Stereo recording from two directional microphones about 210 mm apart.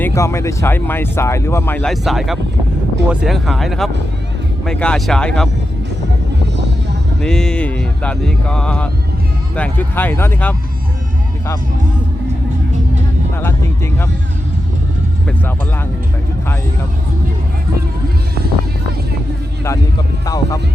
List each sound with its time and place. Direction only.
0.0 s speech: 15° left (ahead or behind)
7.2 s speech: 5° left (ahead or behind)
13.4 s speech: 10° left (ahead or behind)
20.2 s speech: 15° left (ahead or behind)